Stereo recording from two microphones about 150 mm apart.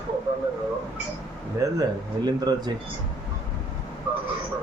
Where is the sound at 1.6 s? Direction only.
20° right (ahead or behind).